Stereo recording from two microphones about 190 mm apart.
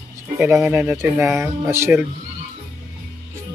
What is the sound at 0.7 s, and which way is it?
Speech, 15° right (ahead or behind).